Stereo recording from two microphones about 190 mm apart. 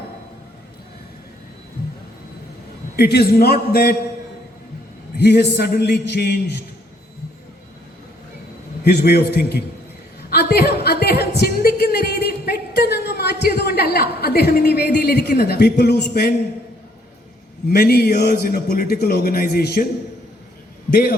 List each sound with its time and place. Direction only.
2.9 s a man's voice: 55° left (ahead or behind)
5.1 s a man's voice: 60° left (ahead or behind)
8.8 s a man's voice: 60° left (ahead or behind)
10.2 s a sound: 55° left (ahead or behind)
17.7 s a man's voice: 55° left (ahead or behind)
20.9 s a man's voice: 50° left (ahead or behind)